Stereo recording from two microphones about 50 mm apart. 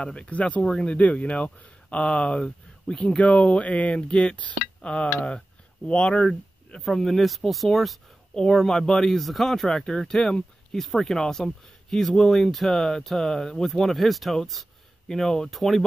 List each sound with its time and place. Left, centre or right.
0.0 s speech: left
0.7 s speech: centre
0.9 s speech: left
6.8 s speech: centre
10.8 s speech: centre